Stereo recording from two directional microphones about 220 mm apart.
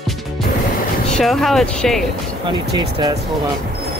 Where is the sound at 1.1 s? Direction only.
Centre (ahead or behind).